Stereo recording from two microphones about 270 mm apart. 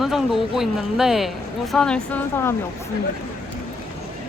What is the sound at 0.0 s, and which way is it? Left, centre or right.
Speech, centre.